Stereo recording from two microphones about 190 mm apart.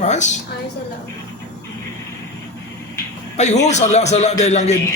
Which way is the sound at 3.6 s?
35° left (ahead or behind).